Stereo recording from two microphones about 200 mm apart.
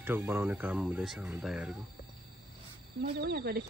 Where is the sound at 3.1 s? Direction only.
50° right (ahead or behind).